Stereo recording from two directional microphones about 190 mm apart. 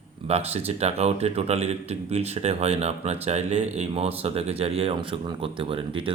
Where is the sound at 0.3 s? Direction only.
35° right (ahead or behind).